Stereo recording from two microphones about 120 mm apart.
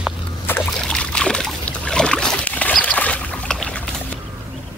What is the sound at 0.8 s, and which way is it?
Boat, 5° left (ahead or behind).